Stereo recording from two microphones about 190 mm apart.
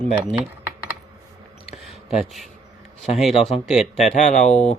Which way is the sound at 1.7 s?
Centre (ahead or behind).